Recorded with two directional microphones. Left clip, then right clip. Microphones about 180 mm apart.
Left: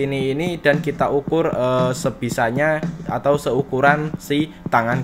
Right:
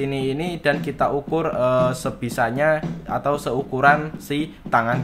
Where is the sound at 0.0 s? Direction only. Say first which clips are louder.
Left 3 dB; 20° left (ahead or behind).